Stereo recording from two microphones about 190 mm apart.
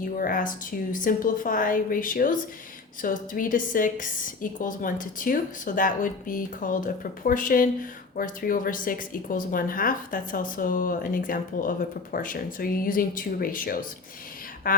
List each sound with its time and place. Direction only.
0.0 s a woman's voice: 45° left (ahead or behind)